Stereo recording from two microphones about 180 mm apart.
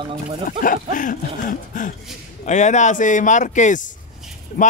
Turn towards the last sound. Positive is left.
turn(degrees=50)  # may be behind; listen again after turning